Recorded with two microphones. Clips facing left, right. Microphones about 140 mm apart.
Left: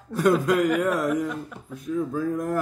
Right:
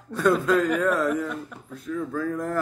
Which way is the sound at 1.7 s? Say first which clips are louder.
Left 2 dB; 20° left (ahead or behind).